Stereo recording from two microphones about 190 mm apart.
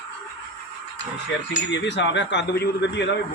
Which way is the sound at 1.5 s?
70° left (ahead or behind).